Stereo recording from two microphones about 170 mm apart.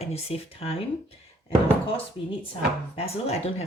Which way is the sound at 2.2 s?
30° left (ahead or behind).